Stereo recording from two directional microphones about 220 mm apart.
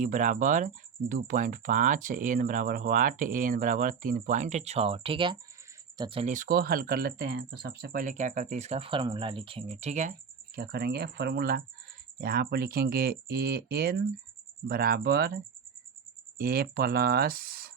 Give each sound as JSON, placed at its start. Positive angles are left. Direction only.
{"t": 0.0, "sound": "speech", "side_deg": -35}
{"t": 16.4, "sound": "speech", "side_deg": -45}